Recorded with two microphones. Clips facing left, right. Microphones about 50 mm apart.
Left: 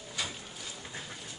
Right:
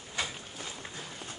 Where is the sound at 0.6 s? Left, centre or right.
Right.